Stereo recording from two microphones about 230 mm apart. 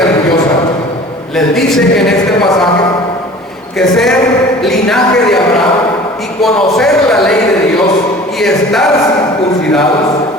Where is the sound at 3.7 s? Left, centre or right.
Centre.